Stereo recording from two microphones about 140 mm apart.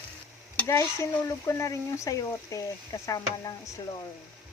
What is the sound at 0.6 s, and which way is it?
Speech, 20° left (ahead or behind).